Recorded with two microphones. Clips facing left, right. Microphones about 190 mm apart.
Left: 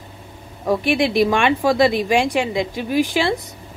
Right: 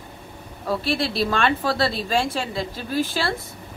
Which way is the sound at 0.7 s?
15° left (ahead or behind).